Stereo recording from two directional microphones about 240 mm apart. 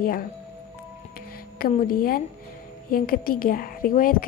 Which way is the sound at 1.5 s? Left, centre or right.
Left.